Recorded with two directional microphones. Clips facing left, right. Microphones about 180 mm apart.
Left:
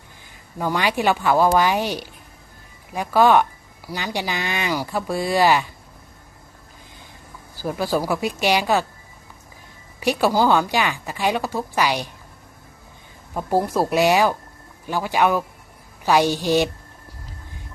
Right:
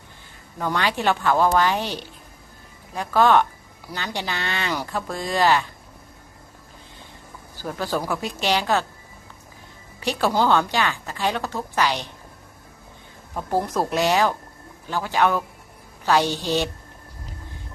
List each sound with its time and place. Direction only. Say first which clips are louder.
0.6 s speech: left 2 dB; 10° left (ahead or behind)
7.6 s speech: left 4 dB; 10° left (ahead or behind)
10.0 s speech: left 3 dB; 15° left (ahead or behind)
13.3 s speech: left 3 dB; 10° left (ahead or behind)